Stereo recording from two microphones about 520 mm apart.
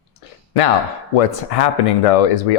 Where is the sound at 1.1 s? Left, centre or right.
Left.